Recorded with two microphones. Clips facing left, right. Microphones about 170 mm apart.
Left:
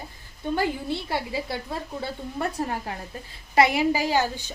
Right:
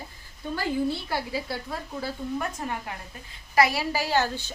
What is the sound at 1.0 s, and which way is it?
A woman's voice, 25° left (ahead or behind).